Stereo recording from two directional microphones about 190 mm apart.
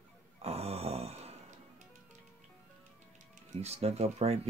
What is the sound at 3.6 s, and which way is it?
Speech, 35° right (ahead or behind).